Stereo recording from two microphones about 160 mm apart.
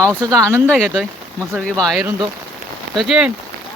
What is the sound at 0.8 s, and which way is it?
Speech, centre (ahead or behind).